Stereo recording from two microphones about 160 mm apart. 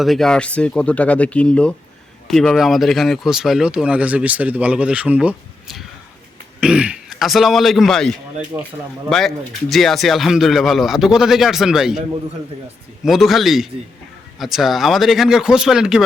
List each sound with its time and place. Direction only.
0.0 s speech: centre (ahead or behind)
8.5 s speech: 15° right (ahead or behind)
9.0 s speech: 5° left (ahead or behind)
13.1 s speech: centre (ahead or behind)